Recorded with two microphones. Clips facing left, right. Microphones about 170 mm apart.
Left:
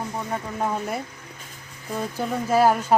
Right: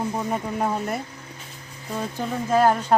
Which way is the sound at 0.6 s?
5° right (ahead or behind).